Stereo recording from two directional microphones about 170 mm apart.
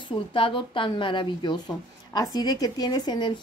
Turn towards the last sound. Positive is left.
turn(degrees=25)  # may be behind; listen again after turning